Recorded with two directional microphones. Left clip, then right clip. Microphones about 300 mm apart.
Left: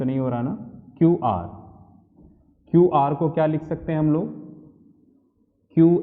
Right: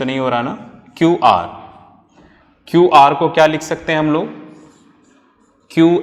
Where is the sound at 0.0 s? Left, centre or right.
Centre.